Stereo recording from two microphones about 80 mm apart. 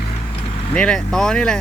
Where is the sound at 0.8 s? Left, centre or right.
Centre.